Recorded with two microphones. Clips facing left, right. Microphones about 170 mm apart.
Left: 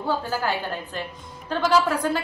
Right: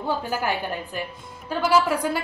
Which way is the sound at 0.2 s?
15° right (ahead or behind).